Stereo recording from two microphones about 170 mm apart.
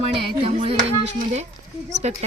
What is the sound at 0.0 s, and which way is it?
Music, 35° right (ahead or behind).